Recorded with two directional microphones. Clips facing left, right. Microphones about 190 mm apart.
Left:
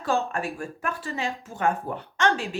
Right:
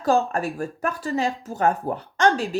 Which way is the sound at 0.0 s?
40° right (ahead or behind).